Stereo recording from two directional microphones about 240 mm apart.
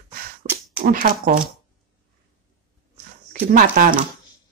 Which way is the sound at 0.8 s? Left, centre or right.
Right.